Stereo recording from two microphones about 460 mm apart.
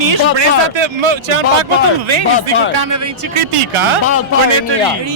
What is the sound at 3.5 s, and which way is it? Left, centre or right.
Speech, right.